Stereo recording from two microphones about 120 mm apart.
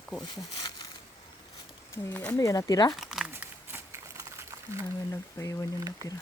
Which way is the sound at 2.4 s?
25° left (ahead or behind).